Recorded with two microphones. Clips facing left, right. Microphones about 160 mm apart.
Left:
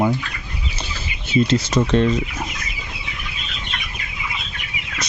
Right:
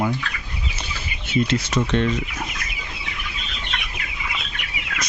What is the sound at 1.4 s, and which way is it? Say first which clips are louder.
Speech: left 4 dB; 35° left (ahead or behind).